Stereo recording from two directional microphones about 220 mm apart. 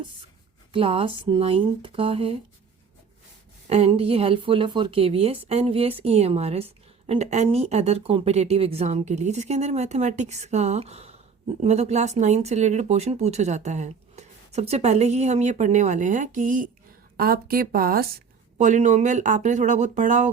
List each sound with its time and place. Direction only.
0.7 s speech: 25° right (ahead or behind)
3.7 s speech: 30° right (ahead or behind)